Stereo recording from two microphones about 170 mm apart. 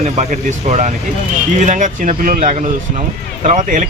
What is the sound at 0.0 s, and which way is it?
Speech, 40° right (ahead or behind).